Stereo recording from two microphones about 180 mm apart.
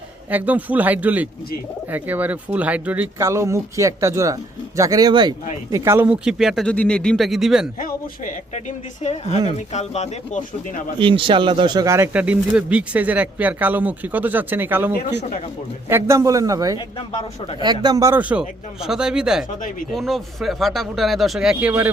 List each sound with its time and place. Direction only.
0.3 s speech: 10° right (ahead or behind)
7.8 s speech: 50° left (ahead or behind)
10.9 s speech: 30° right (ahead or behind); by 21.8 s 10° right (ahead or behind)